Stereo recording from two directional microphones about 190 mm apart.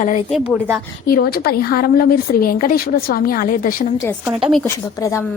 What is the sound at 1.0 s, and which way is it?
A woman's voice, 50° left (ahead or behind).